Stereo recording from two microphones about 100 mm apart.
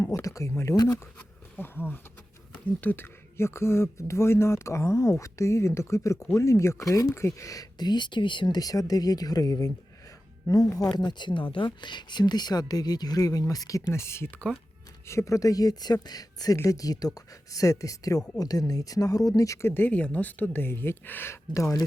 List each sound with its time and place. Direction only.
0.0 s speech: 30° left (ahead or behind)
1.5 s speech: 20° left (ahead or behind)
10.9 s speech: 45° left (ahead or behind)
19.7 s speech: 15° left (ahead or behind); by 21.8 s 35° left (ahead or behind)